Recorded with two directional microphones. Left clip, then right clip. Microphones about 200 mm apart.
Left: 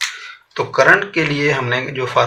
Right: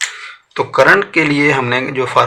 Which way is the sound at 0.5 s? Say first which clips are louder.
Right 2 dB; 30° right (ahead or behind).